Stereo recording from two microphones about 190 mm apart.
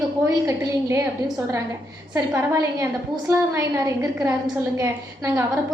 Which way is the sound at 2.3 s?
15° right (ahead or behind).